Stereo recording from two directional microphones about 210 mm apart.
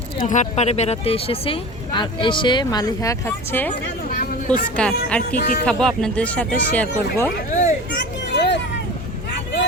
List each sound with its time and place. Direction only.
0.2 s speech: 35° left (ahead or behind); by 3.7 s 10° left (ahead or behind)
4.1 s a sound: 40° left (ahead or behind)
4.8 s speech: 5° left (ahead or behind)
5.4 s speech: 40° left (ahead or behind)
5.6 s speech: 5° left (ahead or behind)
7.5 s children playing: 35° left (ahead or behind)
7.9 s a sound: 55° left (ahead or behind)